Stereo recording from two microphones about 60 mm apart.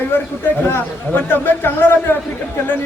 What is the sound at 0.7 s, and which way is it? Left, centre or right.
A man's voice, left.